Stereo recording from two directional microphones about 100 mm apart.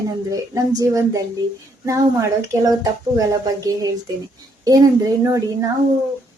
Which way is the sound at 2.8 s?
35° right (ahead or behind).